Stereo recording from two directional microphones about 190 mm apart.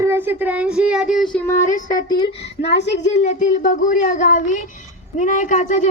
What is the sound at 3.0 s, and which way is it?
A woman's voice, 40° left (ahead or behind).